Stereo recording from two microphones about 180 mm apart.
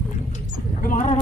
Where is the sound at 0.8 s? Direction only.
45° left (ahead or behind).